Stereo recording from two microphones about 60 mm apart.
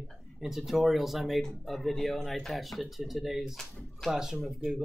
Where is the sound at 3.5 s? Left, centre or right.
Centre.